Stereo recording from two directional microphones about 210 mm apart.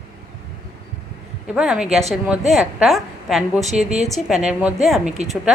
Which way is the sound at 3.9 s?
30° right (ahead or behind).